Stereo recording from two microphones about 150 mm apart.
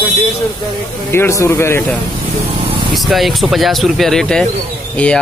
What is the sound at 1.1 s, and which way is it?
Speech, 15° left (ahead or behind).